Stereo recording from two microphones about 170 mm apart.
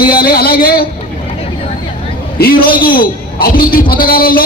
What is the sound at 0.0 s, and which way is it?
Speech, 60° left (ahead or behind).